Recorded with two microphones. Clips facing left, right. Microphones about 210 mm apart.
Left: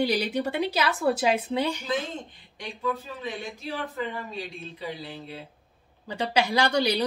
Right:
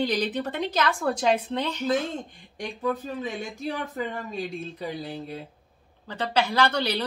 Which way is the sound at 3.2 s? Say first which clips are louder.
Right 3 dB; 45° right (ahead or behind).